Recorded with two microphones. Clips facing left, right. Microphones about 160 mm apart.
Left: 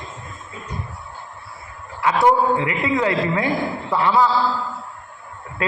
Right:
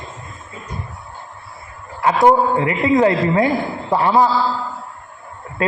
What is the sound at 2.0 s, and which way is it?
A man's voice, 35° right (ahead or behind).